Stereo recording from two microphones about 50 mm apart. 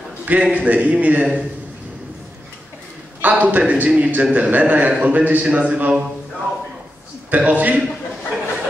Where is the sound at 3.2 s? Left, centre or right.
Right.